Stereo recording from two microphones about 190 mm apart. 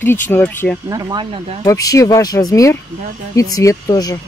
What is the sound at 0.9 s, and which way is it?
Speech, 20° right (ahead or behind).